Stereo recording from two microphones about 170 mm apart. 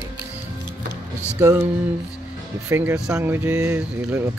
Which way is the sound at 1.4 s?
15° right (ahead or behind).